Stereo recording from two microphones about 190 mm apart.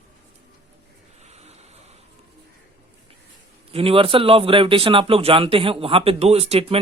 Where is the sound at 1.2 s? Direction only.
35° right (ahead or behind).